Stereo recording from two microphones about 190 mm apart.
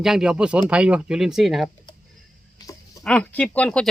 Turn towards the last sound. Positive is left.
turn(degrees=5)  # may be behind; listen again after turning